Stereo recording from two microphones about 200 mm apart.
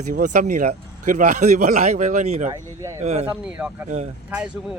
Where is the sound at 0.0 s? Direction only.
45° right (ahead or behind).